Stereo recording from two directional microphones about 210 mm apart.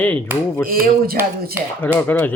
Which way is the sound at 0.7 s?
45° right (ahead or behind).